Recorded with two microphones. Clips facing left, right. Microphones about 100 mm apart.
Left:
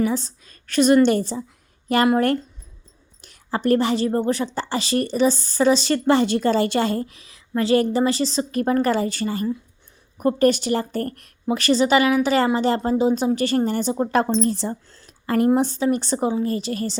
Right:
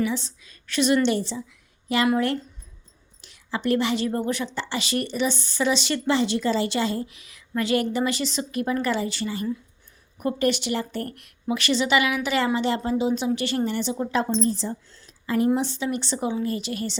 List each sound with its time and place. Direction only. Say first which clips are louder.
0.0 s a woman's voice: left 4 dB; 40° left (ahead or behind); by 14.8 s 65° left (ahead or behind)
14.9 s speech: left 3 dB; 55° left (ahead or behind)